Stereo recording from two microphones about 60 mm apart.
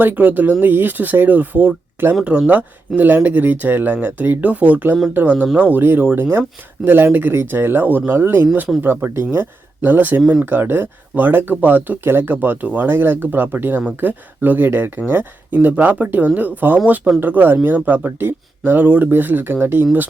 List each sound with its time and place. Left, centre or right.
0.0 s speech: right
5.8 s speech: right